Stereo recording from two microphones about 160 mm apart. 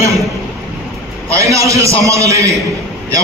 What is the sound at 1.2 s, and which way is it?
A man's voice, 20° right (ahead or behind).